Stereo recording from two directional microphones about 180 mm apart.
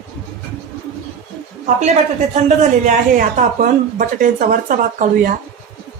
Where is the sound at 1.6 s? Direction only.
40° right (ahead or behind).